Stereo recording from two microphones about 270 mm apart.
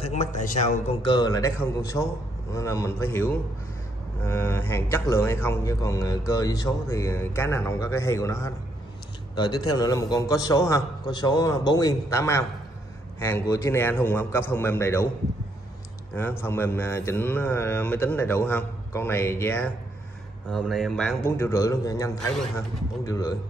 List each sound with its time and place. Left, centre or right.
0.0 s a man's voice: left; by 15.0 s centre
16.2 s a man's voice: centre